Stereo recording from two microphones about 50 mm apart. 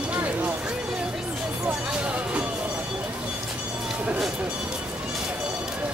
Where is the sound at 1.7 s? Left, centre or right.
Right.